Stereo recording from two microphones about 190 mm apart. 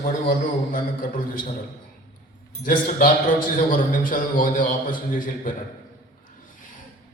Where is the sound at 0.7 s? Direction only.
45° left (ahead or behind).